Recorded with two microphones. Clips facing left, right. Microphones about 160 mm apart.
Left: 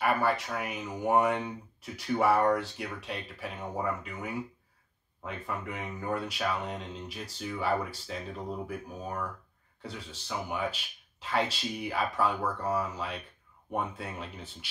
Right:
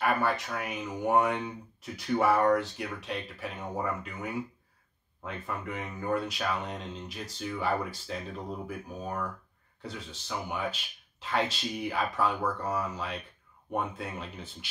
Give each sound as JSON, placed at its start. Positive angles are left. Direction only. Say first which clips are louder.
{"t": 0.0, "sound": "speech", "louder": "even", "side_deg": 5}